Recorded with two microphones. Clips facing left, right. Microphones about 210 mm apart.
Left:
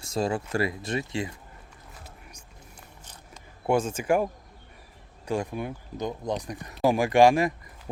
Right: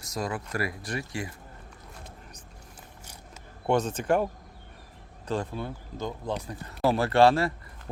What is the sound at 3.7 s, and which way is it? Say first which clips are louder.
Speech: left 1 dB; 10° left (ahead or behind).